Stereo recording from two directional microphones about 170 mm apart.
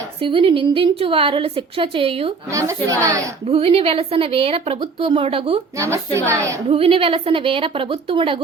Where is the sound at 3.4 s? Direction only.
35° right (ahead or behind).